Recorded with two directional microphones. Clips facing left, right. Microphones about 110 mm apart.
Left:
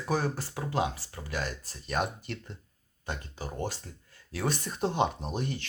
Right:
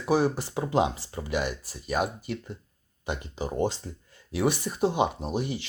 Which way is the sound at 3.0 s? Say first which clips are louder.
Right 6 dB; 15° right (ahead or behind).